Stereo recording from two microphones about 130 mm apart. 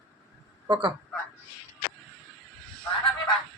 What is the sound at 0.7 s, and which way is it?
Speech, 35° right (ahead or behind).